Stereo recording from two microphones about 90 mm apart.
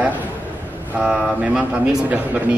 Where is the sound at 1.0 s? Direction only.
5° right (ahead or behind).